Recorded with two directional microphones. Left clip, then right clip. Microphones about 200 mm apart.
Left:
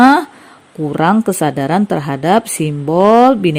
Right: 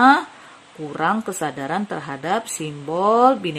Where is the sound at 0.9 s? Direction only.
35° left (ahead or behind).